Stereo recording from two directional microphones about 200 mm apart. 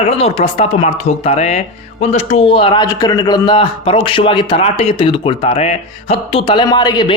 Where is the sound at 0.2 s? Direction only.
30° left (ahead or behind).